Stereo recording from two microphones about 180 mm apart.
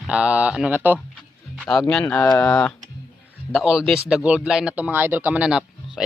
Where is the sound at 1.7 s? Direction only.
5° left (ahead or behind).